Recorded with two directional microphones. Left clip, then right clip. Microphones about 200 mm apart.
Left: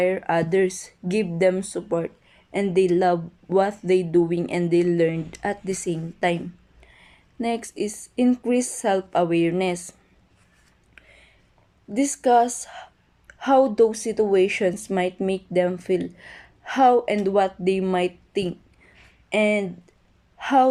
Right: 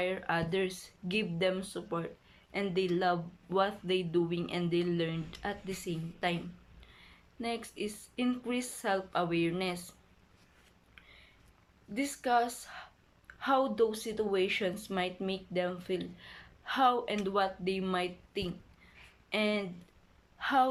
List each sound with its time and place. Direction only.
0.0 s a woman's voice: 35° left (ahead or behind)
7.4 s a woman's voice: 35° left (ahead or behind)
11.9 s a woman's voice: 35° left (ahead or behind)